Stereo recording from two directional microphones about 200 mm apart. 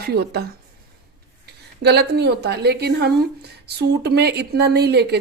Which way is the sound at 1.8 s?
55° right (ahead or behind).